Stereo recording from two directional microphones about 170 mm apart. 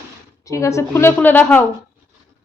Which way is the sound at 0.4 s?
15° left (ahead or behind).